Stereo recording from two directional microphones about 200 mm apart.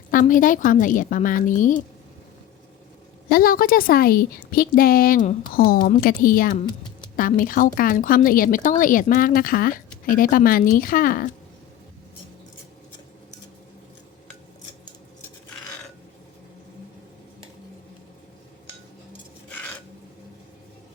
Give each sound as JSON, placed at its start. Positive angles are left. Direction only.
{"t": 0.1, "sound": "a woman's voice", "side_deg": 40}
{"t": 3.2, "sound": "speech", "side_deg": 45}